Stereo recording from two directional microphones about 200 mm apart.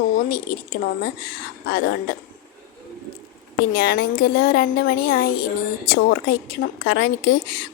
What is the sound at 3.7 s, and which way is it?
A woman's voice, 50° left (ahead or behind).